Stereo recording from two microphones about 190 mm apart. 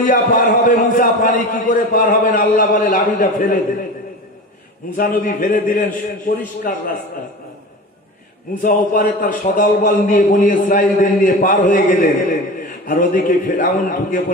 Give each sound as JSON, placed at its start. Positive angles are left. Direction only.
{"t": 0.0, "sound": "a man's voice", "side_deg": 45}
{"t": 4.9, "sound": "a man's voice", "side_deg": 50}
{"t": 8.6, "sound": "a man's voice", "side_deg": 45}